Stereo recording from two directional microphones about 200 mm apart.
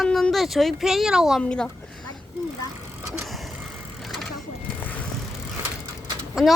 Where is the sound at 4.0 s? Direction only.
Centre (ahead or behind).